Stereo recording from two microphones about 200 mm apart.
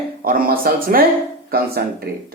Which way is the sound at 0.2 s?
45° right (ahead or behind).